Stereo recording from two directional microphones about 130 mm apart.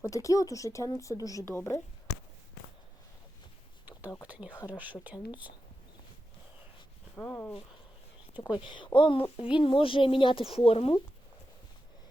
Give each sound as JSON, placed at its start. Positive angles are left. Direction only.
{"t": 0.0, "sound": "a woman's voice", "side_deg": 25}
{"t": 4.3, "sound": "speech", "side_deg": -10}
{"t": 7.2, "sound": "speech", "side_deg": 15}
{"t": 8.6, "sound": "speech", "side_deg": 40}